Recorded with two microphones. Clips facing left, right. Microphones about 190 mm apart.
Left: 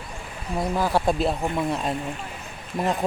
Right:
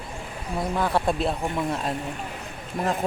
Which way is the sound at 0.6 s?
Centre (ahead or behind).